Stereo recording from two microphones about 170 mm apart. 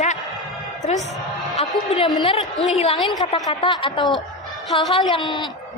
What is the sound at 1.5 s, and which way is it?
A woman's voice, 30° left (ahead or behind).